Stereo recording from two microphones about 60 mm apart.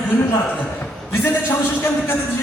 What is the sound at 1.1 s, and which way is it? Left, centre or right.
A man's voice, left.